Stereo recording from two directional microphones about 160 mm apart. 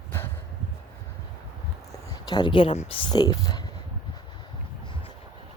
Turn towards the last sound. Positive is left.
turn(degrees=25)  # may be behind; listen again after turning